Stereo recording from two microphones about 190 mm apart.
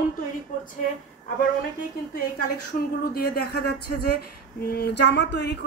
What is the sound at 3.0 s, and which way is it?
A woman's voice, 50° left (ahead or behind).